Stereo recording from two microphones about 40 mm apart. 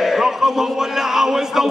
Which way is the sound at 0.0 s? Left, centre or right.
Centre.